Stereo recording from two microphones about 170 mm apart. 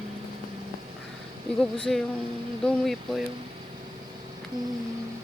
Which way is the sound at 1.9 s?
Centre (ahead or behind).